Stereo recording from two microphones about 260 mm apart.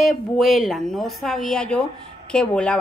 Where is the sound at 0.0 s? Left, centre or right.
Centre.